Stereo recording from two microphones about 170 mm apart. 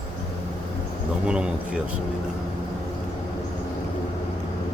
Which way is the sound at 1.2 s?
5° right (ahead or behind).